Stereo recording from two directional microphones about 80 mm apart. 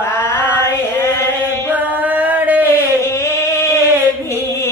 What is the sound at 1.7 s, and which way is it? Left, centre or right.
Chant, right.